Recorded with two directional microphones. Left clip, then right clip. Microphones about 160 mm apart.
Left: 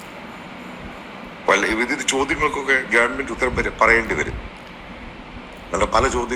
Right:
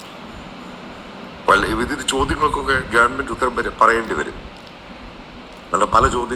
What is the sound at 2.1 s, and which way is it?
Speech, 10° right (ahead or behind).